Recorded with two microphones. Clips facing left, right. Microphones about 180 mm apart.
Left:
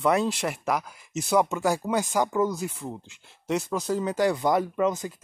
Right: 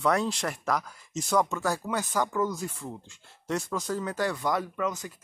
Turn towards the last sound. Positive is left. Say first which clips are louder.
# left 6 dB
turn(degrees=25)  # may be behind; listen again after turning